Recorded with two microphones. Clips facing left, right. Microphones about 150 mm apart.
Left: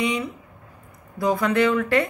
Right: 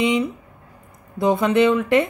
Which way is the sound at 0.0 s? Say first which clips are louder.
Right 5 dB; 25° right (ahead or behind).